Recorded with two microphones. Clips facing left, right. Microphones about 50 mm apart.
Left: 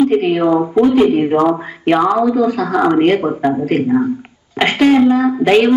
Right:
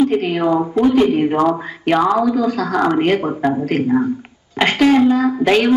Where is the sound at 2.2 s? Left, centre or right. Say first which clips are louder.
Left 3 dB; left.